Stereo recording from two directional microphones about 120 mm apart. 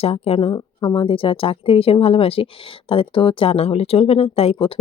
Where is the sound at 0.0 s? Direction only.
55° left (ahead or behind).